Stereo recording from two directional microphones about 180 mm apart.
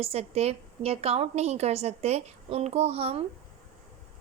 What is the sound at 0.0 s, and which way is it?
A woman's voice, 35° right (ahead or behind).